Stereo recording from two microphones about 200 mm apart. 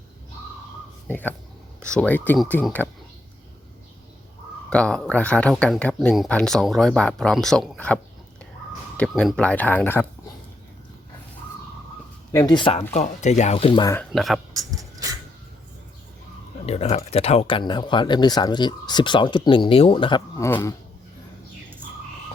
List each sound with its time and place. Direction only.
1.0 s speech: 10° left (ahead or behind)
4.7 s speech: 5° left (ahead or behind)
9.0 s speech: 5° left (ahead or behind)
12.3 s speech: 15° left (ahead or behind)
12.9 s speech: 35° left (ahead or behind)
14.1 s speech: centre (ahead or behind)
14.5 s a sound: 15° right (ahead or behind)
16.6 s speech: 30° left (ahead or behind); by 20.7 s 15° left (ahead or behind)